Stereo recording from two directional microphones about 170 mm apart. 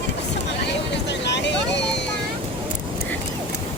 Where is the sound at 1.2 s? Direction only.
90° left.